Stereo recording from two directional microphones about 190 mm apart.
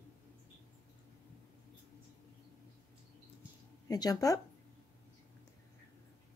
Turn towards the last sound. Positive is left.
turn(degrees=20)  # may be behind; listen again after turning